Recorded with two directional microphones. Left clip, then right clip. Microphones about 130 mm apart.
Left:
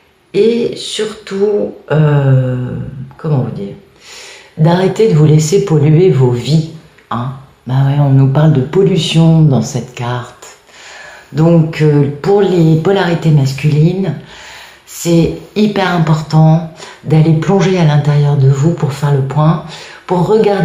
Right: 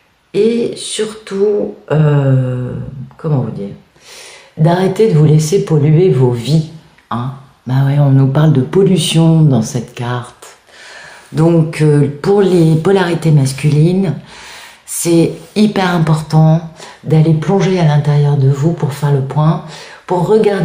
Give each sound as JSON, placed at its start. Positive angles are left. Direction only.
{"t": 0.3, "sound": "speech", "side_deg": -25}
{"t": 4.6, "sound": "speech", "side_deg": -25}
{"t": 7.1, "sound": "speech", "side_deg": -40}
{"t": 7.6, "sound": "speech", "side_deg": -55}
{"t": 11.3, "sound": "speech", "side_deg": -50}